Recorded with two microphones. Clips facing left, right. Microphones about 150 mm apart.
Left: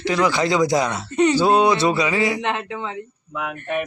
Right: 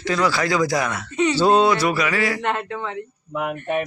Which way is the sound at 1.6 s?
25° left (ahead or behind).